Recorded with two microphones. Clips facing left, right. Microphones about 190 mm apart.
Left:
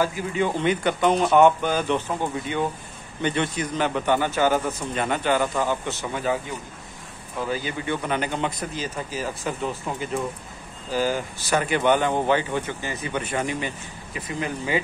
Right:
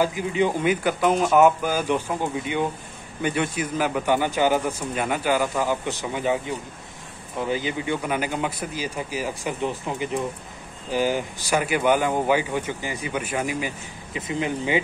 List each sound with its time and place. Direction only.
0.0 s a man's voice: 15° right (ahead or behind)
14.1 s speech: 20° right (ahead or behind)